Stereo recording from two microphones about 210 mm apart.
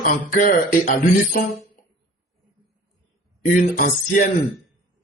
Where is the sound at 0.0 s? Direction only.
40° left (ahead or behind).